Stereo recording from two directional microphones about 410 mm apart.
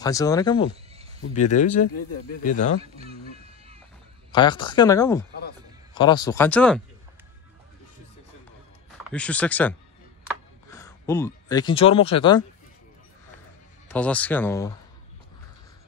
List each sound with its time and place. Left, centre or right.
0.0 s speech: centre
2.8 s speech: centre
4.3 s speech: centre
9.0 s speech: centre
13.8 s speech: centre